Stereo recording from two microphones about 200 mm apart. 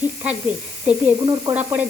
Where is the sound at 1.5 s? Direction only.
10° right (ahead or behind).